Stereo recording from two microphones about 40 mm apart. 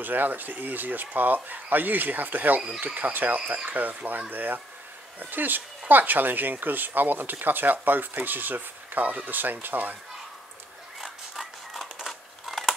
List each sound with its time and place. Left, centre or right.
0.0 s speech: right
11.0 s a sound: centre
11.8 s typing: centre